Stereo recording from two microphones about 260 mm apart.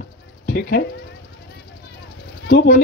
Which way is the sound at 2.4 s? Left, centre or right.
Left.